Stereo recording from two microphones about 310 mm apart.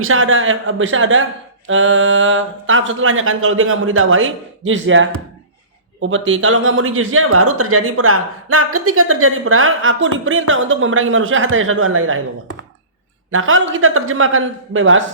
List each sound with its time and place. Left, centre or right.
0.0 s a man's voice: right
13.3 s a man's voice: right